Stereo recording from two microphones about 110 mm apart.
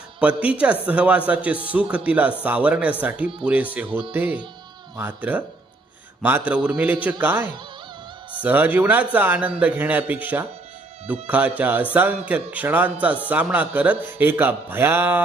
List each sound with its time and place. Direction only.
0.2 s a man's voice: 10° right (ahead or behind)